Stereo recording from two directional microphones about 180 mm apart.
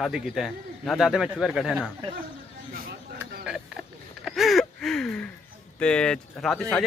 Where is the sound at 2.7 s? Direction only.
55° right (ahead or behind).